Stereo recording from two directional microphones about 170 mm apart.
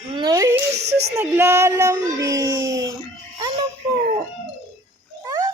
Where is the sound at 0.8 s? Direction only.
75° right (ahead or behind).